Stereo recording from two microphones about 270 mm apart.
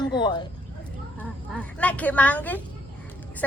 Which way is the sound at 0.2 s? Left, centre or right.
Centre.